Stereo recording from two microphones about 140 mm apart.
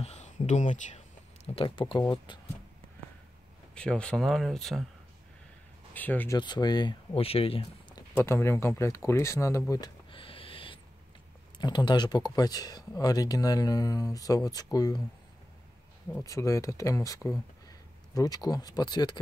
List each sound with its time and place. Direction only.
0.0 s speech: 50° left (ahead or behind); by 2.4 s 35° left (ahead or behind)
3.7 s speech: 5° left (ahead or behind)
5.9 s speech: 10° left (ahead or behind)
6.3 s speech: 30° left (ahead or behind)
8.1 s speech: 20° left (ahead or behind)
10.1 s owl: 40° left (ahead or behind)
11.5 s speech: 30° left (ahead or behind)
16.3 s speech: 20° left (ahead or behind)